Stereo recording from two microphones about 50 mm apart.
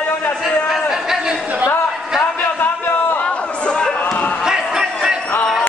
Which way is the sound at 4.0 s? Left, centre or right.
Left.